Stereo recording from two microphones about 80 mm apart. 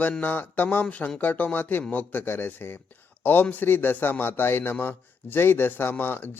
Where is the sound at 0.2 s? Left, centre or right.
Left.